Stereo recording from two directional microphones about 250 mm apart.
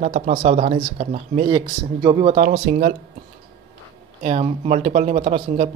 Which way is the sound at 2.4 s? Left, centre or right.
Right.